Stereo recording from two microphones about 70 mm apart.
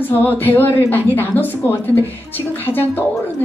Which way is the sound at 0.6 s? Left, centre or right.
Left.